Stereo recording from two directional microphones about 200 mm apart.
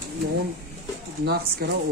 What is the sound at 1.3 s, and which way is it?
Speech, 55° right (ahead or behind).